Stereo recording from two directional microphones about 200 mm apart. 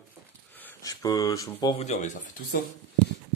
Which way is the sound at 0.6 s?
15° left (ahead or behind).